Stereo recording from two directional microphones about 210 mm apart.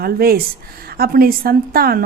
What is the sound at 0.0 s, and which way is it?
A woman's voice, 45° right (ahead or behind).